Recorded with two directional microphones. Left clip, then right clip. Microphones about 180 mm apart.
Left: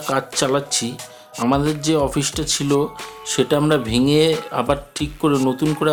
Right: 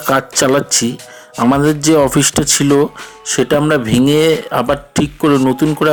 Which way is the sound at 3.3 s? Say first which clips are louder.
Right 5 dB; 20° right (ahead or behind).